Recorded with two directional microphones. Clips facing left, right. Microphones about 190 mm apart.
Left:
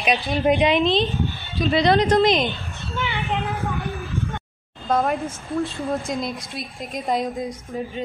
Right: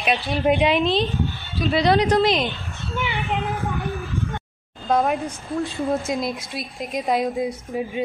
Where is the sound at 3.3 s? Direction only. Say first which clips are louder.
Even; centre (ahead or behind).